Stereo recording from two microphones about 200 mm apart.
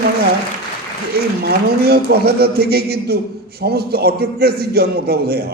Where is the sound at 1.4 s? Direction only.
50° right (ahead or behind).